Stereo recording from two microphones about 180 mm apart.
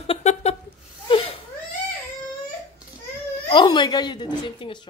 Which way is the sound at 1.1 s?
30° left (ahead or behind).